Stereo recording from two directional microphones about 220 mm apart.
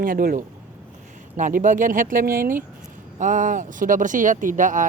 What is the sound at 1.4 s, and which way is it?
Speech, 35° right (ahead or behind).